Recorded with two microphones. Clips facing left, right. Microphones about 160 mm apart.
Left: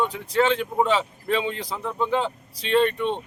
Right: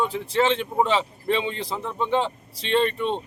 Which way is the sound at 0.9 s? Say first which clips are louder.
Right 1 dB; centre (ahead or behind).